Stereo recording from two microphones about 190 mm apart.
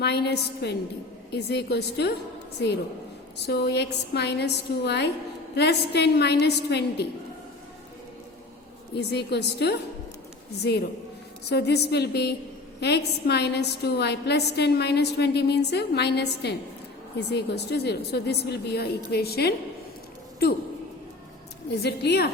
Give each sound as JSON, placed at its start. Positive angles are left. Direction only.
{"t": 0.0, "sound": "a woman's voice", "side_deg": 60}
{"t": 3.4, "sound": "a woman's voice", "side_deg": 60}
{"t": 9.0, "sound": "a woman's voice", "side_deg": 60}
{"t": 21.8, "sound": "a woman's voice", "side_deg": 60}